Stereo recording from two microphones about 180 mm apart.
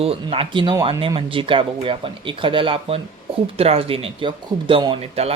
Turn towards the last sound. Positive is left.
turn(degrees=-35)  # may be behind; listen again after turning